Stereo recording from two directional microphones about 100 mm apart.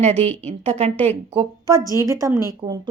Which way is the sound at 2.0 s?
35° right (ahead or behind).